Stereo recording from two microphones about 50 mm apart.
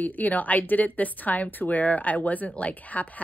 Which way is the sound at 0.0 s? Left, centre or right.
Left.